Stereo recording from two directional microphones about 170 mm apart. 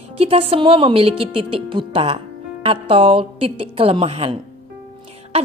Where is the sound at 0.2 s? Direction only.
35° right (ahead or behind).